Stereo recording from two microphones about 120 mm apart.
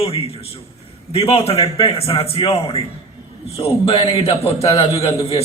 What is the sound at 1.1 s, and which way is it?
A man's voice, 55° left (ahead or behind).